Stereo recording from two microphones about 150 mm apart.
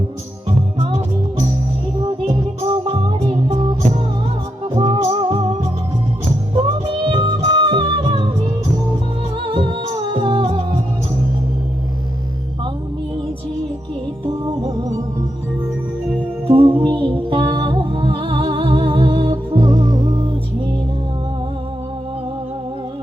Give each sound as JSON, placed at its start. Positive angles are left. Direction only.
{"t": 0.4, "sound": "music", "side_deg": -40}
{"t": 2.0, "sound": "music", "side_deg": -30}
{"t": 6.6, "sound": "music", "side_deg": -35}
{"t": 9.5, "sound": "music", "side_deg": -35}
{"t": 14.3, "sound": "music", "side_deg": -30}
{"t": 16.5, "sound": "music", "side_deg": -35}